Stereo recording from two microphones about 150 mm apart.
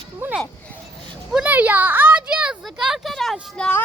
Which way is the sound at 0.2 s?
15° right (ahead or behind).